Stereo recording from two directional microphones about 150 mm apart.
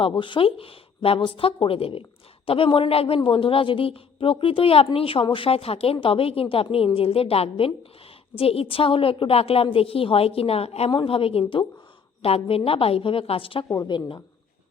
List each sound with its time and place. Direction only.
0.0 s a woman's voice: 35° left (ahead or behind)